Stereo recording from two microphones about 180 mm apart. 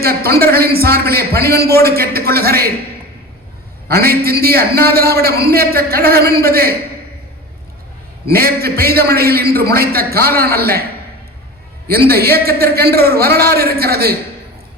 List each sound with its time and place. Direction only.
0.0 s a man's voice: 60° right (ahead or behind)
3.8 s a man's voice: 60° right (ahead or behind)
8.3 s a man's voice: 55° right (ahead or behind)
11.9 s a man's voice: 60° right (ahead or behind)